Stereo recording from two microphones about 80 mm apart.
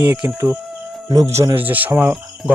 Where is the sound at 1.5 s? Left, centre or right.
Right.